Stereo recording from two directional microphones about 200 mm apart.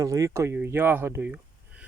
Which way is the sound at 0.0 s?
15° right (ahead or behind).